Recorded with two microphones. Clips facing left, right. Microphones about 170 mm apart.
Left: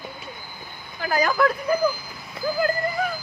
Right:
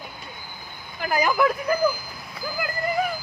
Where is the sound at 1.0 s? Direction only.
15° right (ahead or behind).